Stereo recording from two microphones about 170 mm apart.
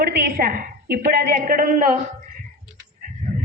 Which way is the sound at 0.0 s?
65° right (ahead or behind).